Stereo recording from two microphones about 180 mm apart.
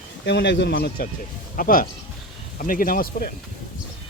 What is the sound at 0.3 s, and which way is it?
Speech, 75° left (ahead or behind).